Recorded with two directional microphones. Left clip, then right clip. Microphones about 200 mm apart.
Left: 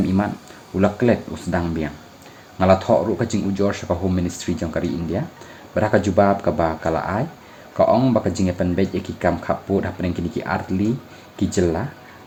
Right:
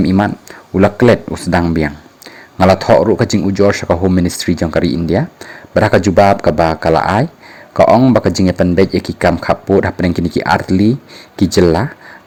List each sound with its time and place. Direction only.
0.0 s speech: 45° right (ahead or behind)